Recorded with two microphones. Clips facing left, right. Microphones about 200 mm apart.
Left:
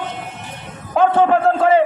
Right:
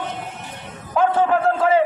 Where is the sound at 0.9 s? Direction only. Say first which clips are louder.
Left 4 dB; 30° left (ahead or behind).